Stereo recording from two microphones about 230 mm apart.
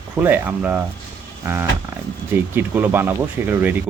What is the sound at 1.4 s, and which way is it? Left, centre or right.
Roaring cats, centre.